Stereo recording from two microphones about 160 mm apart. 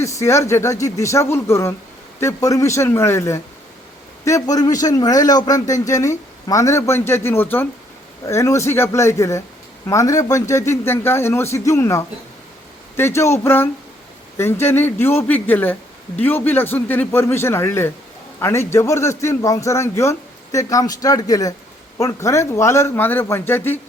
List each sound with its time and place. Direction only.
0.0 s a man's voice: 20° left (ahead or behind)